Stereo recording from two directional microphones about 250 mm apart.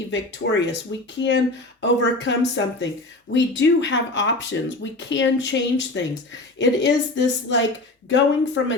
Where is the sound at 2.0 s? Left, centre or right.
Left.